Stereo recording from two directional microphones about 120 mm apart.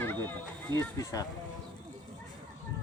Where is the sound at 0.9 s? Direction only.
30° left (ahead or behind).